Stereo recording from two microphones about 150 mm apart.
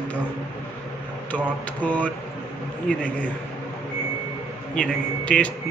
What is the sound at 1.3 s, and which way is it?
A man's voice, 10° left (ahead or behind).